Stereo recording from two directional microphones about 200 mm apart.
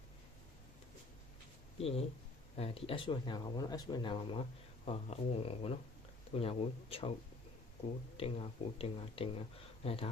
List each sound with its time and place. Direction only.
1.8 s speech: 30° left (ahead or behind)
8.1 s speech: 30° left (ahead or behind)